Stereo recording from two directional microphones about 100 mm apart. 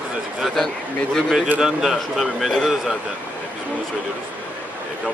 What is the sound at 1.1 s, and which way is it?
Speech, 5° right (ahead or behind).